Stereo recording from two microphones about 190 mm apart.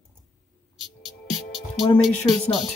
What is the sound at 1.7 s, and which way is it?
Speech, centre (ahead or behind).